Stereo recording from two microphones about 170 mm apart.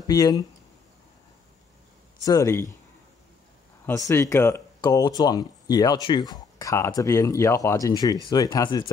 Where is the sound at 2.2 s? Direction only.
20° left (ahead or behind).